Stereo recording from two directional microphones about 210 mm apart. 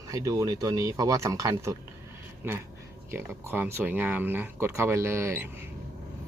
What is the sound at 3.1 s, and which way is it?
Speech, 10° right (ahead or behind).